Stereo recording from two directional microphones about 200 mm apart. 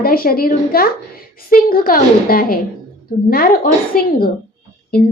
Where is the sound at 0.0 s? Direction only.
45° left (ahead or behind).